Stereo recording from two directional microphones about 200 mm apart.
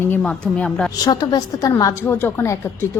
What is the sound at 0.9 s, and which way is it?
A woman's voice, 20° left (ahead or behind).